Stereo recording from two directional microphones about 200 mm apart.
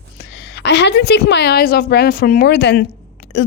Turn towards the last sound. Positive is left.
turn(degrees=55)  # may be behind; listen again after turning